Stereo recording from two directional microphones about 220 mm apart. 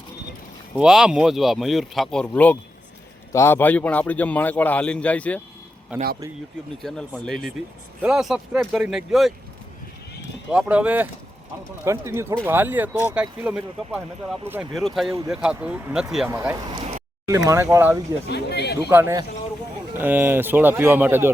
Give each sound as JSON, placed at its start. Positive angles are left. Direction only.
{"t": 0.8, "sound": "a man's voice", "side_deg": -5}
{"t": 5.9, "sound": "speech", "side_deg": -10}
{"t": 10.5, "sound": "speech", "side_deg": -5}
{"t": 18.3, "sound": "speech", "side_deg": 50}
{"t": 18.8, "sound": "speech", "side_deg": -10}